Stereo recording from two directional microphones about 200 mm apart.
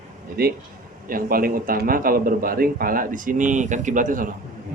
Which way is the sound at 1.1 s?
45° right (ahead or behind).